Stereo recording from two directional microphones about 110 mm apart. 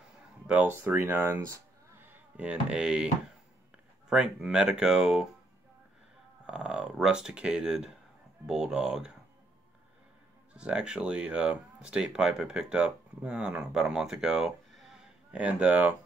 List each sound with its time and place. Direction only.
0.5 s speech: 15° right (ahead or behind)
4.1 s speech: 5° right (ahead or behind)
6.4 s speech: 10° right (ahead or behind)
10.5 s speech: 10° right (ahead or behind)